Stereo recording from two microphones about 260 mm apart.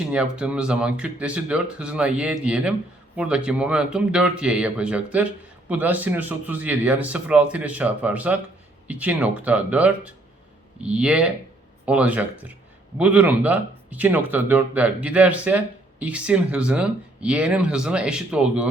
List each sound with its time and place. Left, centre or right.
0.1 s speech: centre